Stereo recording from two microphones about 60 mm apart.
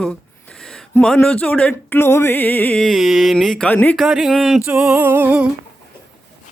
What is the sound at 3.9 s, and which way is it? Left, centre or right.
Speech, centre.